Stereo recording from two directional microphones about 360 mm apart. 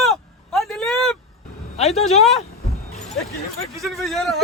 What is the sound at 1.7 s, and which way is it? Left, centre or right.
Speech, centre.